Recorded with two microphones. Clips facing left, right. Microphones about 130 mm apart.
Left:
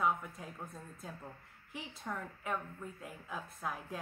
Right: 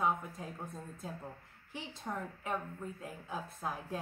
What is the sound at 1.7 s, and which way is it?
A woman's voice, 30° right (ahead or behind).